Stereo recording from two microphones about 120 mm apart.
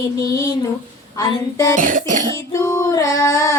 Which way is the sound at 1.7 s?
90° right.